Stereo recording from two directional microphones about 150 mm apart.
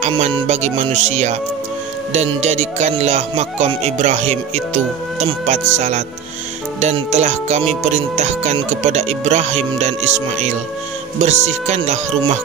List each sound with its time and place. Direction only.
0.2 s speech: 50° right (ahead or behind)